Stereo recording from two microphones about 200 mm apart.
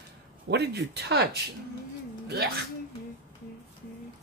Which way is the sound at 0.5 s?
55° right (ahead or behind).